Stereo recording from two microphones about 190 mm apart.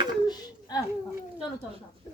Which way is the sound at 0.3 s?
20° left (ahead or behind).